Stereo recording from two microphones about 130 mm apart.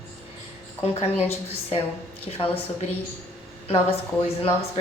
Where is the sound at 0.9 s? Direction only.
50° left (ahead or behind).